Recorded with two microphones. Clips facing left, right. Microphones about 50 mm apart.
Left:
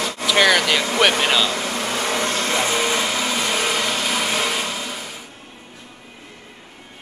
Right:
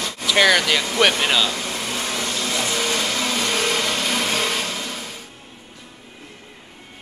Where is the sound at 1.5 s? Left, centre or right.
Left.